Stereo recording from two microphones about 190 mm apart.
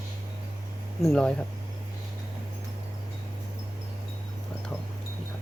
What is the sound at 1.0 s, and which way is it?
Speech, 5° left (ahead or behind).